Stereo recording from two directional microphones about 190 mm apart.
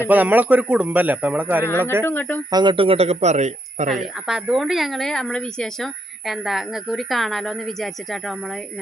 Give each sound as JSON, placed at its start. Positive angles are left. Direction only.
{"t": 0.1, "sound": "a man's voice", "side_deg": -10}
{"t": 2.0, "sound": "speech", "side_deg": 10}
{"t": 2.5, "sound": "speech", "side_deg": -25}
{"t": 3.8, "sound": "speech", "side_deg": 0}